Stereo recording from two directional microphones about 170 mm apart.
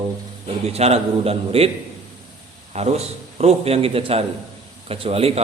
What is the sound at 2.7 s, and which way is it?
A man's voice, 40° right (ahead or behind).